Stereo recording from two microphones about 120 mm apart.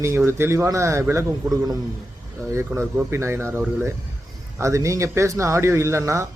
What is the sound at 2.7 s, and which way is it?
A man's voice, 20° right (ahead or behind).